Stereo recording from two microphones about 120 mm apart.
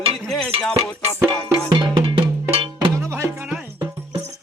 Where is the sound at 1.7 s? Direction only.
40° right (ahead or behind).